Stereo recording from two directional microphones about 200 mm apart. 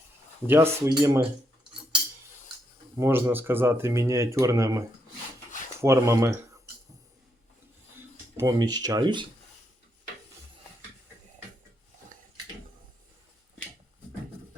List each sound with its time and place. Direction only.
0.4 s speech: 10° right (ahead or behind)
3.0 s speech: 10° right (ahead or behind)
5.8 s speech: 15° right (ahead or behind)
8.4 s speech: 20° right (ahead or behind)